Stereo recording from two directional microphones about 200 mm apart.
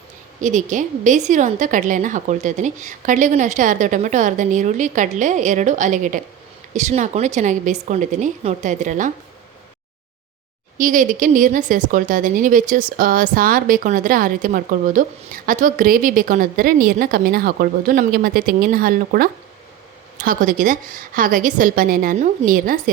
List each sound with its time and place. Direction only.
0.4 s a woman's voice: 40° right (ahead or behind)
10.8 s speech: 40° right (ahead or behind)